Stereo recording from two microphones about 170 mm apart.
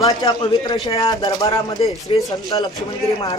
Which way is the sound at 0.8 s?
35° left (ahead or behind).